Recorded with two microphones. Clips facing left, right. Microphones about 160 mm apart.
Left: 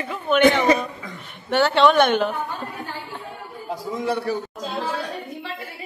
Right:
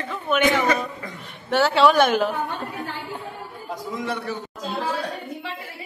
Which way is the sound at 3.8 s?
30° left (ahead or behind).